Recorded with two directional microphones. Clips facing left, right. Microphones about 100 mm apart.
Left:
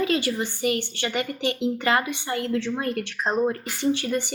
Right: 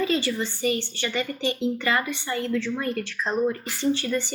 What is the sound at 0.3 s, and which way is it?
Speech, 15° left (ahead or behind).